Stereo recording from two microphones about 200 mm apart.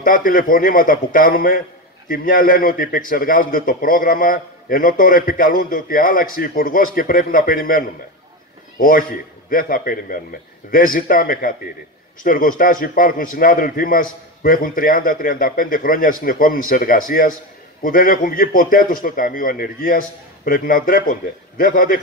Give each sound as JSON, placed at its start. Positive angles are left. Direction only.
{"t": 0.0, "sound": "a man's voice", "side_deg": 45}